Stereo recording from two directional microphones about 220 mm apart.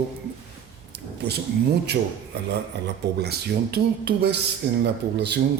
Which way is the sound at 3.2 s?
45° right (ahead or behind).